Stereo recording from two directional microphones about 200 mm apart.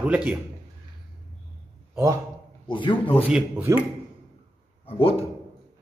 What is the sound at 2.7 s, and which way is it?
Speech, 25° left (ahead or behind).